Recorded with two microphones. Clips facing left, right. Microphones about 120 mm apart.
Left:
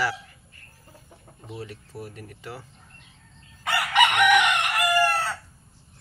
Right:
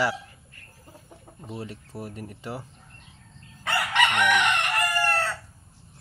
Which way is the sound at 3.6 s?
10° left (ahead or behind).